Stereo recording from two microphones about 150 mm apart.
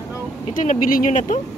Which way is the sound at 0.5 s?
60° left (ahead or behind).